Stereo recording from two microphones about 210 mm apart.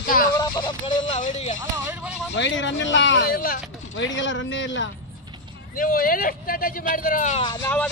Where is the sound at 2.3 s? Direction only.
60° left (ahead or behind); by 3.6 s 45° left (ahead or behind).